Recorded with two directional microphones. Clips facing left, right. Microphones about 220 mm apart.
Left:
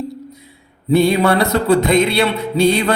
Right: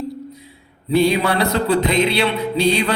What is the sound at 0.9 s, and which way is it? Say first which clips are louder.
Music: left 3 dB; 50° left (ahead or behind).